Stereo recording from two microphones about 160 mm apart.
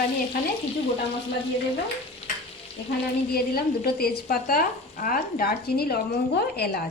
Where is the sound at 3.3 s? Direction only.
70° left (ahead or behind).